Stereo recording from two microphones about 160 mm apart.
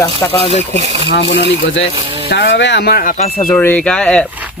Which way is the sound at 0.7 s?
45° right (ahead or behind).